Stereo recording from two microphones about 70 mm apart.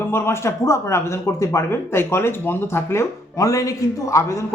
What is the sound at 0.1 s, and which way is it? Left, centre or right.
Speech, left.